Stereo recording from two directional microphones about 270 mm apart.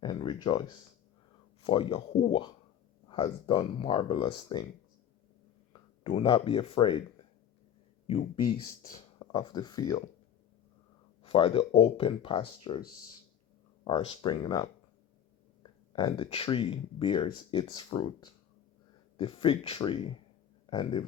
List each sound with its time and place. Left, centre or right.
0.0 s a sound: centre
1.6 s speech: centre
6.0 s speech: centre
8.0 s speech: left
11.2 s speech: centre
13.8 s speech: centre